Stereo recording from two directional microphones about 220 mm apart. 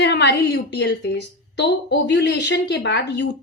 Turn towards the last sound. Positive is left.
turn(degrees=50)  # may be behind; listen again after turning